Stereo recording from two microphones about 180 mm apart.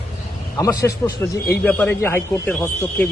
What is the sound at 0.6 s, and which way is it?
Speech, 20° left (ahead or behind).